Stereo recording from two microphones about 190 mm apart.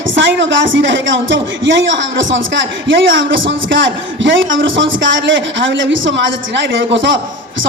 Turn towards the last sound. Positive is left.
turn(degrees=-80)